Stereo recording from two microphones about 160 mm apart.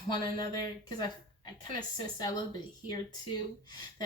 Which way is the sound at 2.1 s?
25° left (ahead or behind).